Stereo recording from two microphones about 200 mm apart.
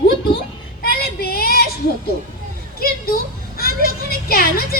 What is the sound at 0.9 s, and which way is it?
Child singing, 50° left (ahead or behind).